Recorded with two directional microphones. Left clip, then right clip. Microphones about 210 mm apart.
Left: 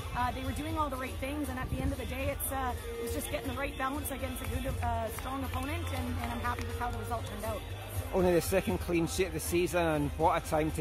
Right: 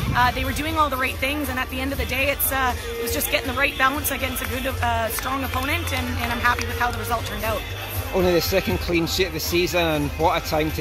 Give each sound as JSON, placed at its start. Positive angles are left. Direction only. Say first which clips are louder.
{"t": 0.7, "sound": "speech", "louder": "right 14 dB", "side_deg": 5}
{"t": 6.4, "sound": "speech", "louder": "right 16 dB", "side_deg": 0}
{"t": 8.1, "sound": "speech", "louder": "right 8 dB", "side_deg": 10}